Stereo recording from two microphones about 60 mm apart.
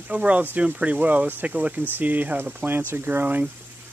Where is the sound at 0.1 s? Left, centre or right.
Right.